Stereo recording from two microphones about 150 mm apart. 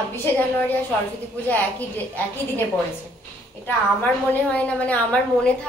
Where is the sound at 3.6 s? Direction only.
10° left (ahead or behind).